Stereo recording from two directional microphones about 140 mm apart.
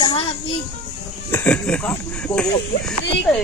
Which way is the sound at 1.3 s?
15° left (ahead or behind).